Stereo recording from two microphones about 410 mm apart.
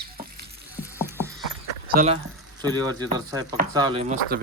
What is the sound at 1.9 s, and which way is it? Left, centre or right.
Speech, centre.